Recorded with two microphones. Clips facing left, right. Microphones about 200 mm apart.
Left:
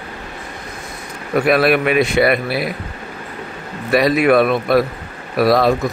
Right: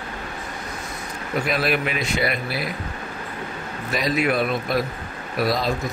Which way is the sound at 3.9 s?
65° left (ahead or behind).